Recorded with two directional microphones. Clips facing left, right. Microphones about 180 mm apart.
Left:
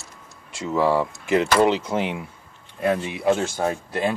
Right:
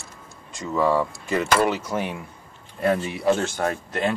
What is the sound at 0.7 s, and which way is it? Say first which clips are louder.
Speech: left 1 dB; 25° left (ahead or behind).